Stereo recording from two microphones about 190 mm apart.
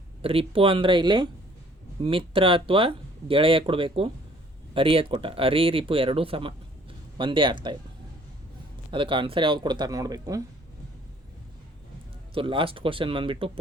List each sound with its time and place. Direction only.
0.2 s speech: 30° right (ahead or behind)
8.9 s speech: 25° right (ahead or behind)
12.3 s speech: 25° right (ahead or behind)